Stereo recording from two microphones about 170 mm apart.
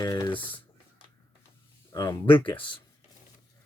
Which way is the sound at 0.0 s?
20° left (ahead or behind).